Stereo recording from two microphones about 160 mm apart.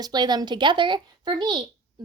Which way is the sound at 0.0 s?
25° right (ahead or behind).